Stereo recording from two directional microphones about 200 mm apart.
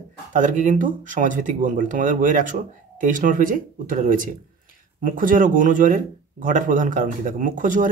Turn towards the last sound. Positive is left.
turn(degrees=-40)  # may be behind; listen again after turning